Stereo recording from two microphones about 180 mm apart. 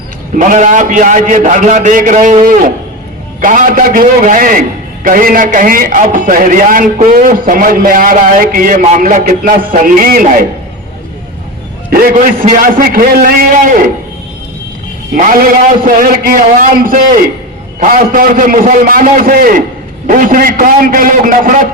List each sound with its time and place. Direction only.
0.3 s a man's voice: 45° right (ahead or behind)
11.9 s a man's voice: 55° right (ahead or behind)
15.1 s a man's voice: 50° right (ahead or behind)